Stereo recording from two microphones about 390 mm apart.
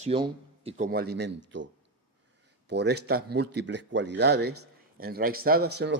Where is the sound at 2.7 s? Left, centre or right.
Right.